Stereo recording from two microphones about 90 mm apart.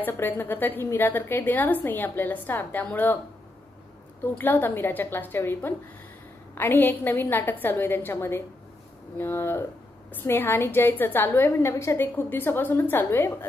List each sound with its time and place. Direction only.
0.0 s a woman's voice: 25° left (ahead or behind)
4.2 s a woman's voice: 20° left (ahead or behind)